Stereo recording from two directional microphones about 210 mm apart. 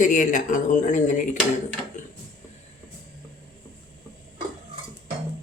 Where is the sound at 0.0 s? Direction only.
40° left (ahead or behind).